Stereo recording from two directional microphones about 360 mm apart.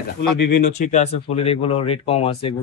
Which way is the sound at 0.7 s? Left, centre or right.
Centre.